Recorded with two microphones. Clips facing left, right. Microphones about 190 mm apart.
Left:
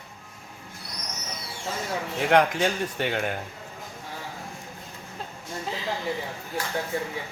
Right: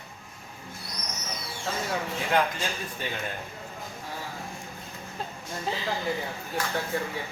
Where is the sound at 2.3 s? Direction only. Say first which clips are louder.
Left 6 dB; 70° left (ahead or behind).